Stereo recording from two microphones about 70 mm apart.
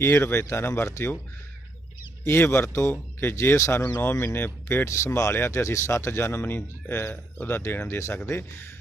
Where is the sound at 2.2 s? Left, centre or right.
Left.